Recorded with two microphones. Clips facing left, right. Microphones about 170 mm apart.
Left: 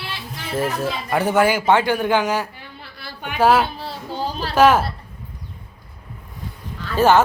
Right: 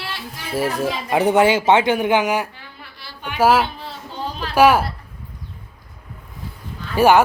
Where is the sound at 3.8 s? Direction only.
35° left (ahead or behind).